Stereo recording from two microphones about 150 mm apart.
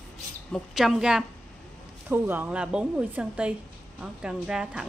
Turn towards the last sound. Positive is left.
turn(degrees=-5)  # may be behind; listen again after turning